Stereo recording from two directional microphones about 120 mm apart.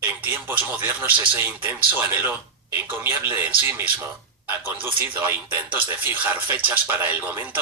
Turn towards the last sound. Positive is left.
turn(degrees=-15)  # may be behind; listen again after turning